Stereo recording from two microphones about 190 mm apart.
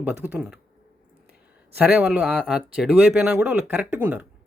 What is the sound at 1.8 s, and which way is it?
Speech, 5° right (ahead or behind).